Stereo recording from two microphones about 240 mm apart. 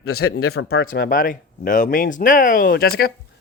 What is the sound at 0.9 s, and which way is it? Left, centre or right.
Speech, left.